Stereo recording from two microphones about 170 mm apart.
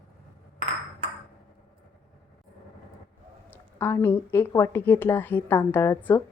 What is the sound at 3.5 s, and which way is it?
A woman's voice, 10° left (ahead or behind).